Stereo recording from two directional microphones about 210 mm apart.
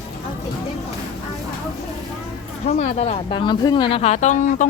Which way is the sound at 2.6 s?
30° left (ahead or behind).